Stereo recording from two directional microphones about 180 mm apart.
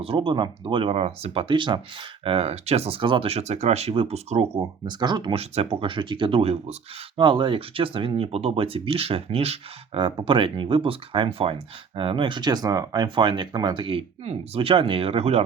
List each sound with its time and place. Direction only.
0.0 s speech: 30° right (ahead or behind)
4.6 s speech: 25° right (ahead or behind)